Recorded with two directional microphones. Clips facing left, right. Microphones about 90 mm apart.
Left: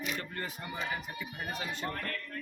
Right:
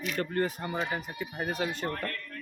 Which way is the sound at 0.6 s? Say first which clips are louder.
Right 5 dB; 35° right (ahead or behind).